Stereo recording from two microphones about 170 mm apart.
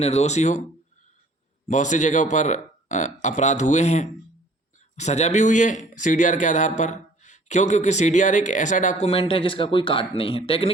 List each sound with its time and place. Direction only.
0.0 s speech: 40° left (ahead or behind)
1.6 s speech: 45° left (ahead or behind)